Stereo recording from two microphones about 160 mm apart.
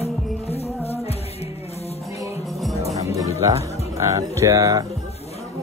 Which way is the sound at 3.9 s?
20° right (ahead or behind).